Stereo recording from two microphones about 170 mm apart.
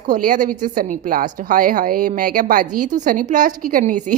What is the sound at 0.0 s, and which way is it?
A woman's voice, 50° right (ahead or behind).